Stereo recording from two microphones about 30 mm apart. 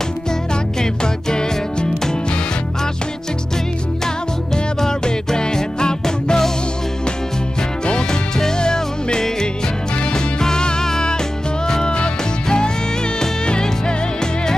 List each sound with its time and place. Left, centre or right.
1.0 s music: left
4.7 s music: left
7.8 s music: left